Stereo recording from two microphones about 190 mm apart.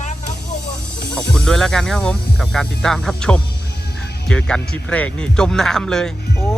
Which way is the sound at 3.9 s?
60° left (ahead or behind).